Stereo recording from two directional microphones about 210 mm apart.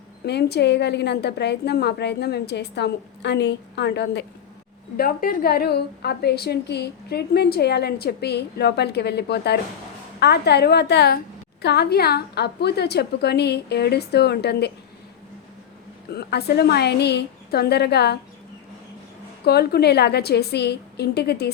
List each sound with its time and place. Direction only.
0.3 s a woman's voice: 50° left (ahead or behind)
16.0 s a woman's voice: 50° left (ahead or behind)
19.5 s a woman's voice: 50° left (ahead or behind)